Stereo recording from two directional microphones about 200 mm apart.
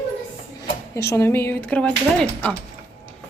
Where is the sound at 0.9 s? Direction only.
15° left (ahead or behind).